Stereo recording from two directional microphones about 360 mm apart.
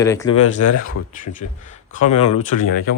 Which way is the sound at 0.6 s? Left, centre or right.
Left.